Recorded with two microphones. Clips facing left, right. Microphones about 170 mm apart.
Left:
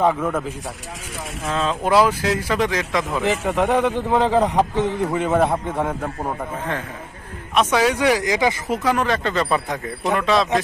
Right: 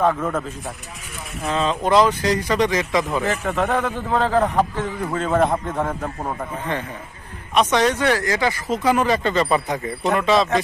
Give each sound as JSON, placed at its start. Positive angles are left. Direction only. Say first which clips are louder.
{"t": 0.0, "sound": "a man's voice", "louder": "left 1 dB", "side_deg": 10}
{"t": 3.3, "sound": "a man's voice", "louder": "left 2 dB", "side_deg": 15}
{"t": 7.5, "sound": "a man's voice", "louder": "even", "side_deg": 5}
{"t": 8.8, "sound": "speech", "louder": "right 2 dB", "side_deg": 0}